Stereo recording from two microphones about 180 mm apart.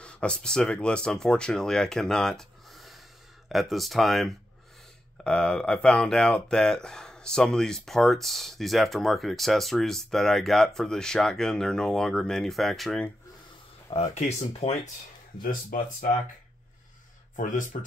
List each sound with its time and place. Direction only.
0.0 s speech: 5° left (ahead or behind)
13.8 s speech: 35° left (ahead or behind)
17.4 s speech: 45° left (ahead or behind)